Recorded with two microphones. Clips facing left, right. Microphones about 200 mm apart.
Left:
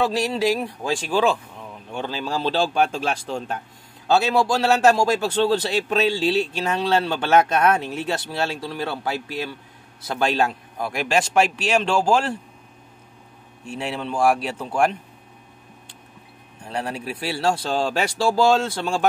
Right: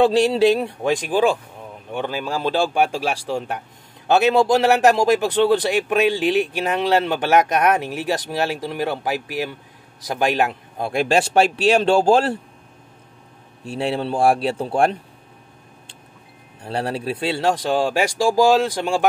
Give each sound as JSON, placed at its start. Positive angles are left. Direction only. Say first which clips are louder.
{"t": 0.0, "sound": "a man's voice", "louder": "right 6 dB", "side_deg": -30}
{"t": 10.8, "sound": "a man's voice", "louder": "right 4 dB", "side_deg": -30}
{"t": 13.7, "sound": "a man's voice", "louder": "right 5 dB", "side_deg": -35}
{"t": 16.6, "sound": "a man's voice", "louder": "right 4 dB", "side_deg": -35}